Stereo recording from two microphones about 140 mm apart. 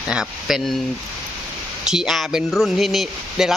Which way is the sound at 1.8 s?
5° right (ahead or behind).